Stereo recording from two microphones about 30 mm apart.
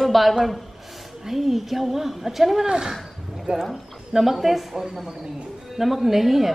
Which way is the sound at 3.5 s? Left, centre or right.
Right.